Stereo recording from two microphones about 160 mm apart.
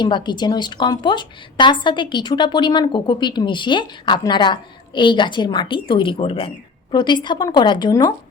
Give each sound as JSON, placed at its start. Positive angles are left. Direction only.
{"t": 0.0, "sound": "a woman's voice", "side_deg": 30}